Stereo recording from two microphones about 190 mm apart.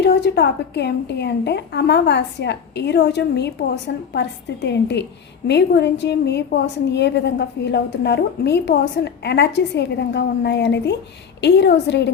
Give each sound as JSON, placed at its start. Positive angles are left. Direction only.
{"t": 0.0, "sound": "a woman's voice", "side_deg": 60}